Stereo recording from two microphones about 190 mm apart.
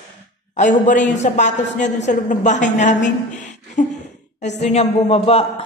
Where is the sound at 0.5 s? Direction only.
40° left (ahead or behind).